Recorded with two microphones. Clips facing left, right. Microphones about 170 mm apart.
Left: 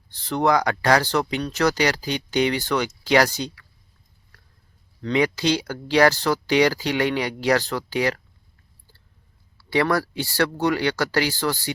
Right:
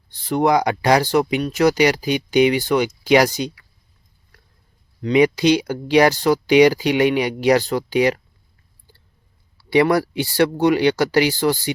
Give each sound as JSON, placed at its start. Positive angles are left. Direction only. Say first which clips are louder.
{"t": 0.1, "sound": "speech", "louder": "right 3 dB", "side_deg": -15}
{"t": 5.0, "sound": "speech", "louder": "right 6 dB", "side_deg": -15}
{"t": 8.9, "sound": "a sound", "louder": "right 5 dB", "side_deg": -15}
{"t": 9.6, "sound": "speech", "louder": "right 5 dB", "side_deg": -15}